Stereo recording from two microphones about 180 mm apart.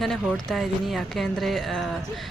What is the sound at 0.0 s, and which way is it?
Speech, centre (ahead or behind).